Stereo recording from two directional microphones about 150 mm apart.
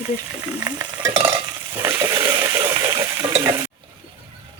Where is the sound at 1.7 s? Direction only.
20° right (ahead or behind).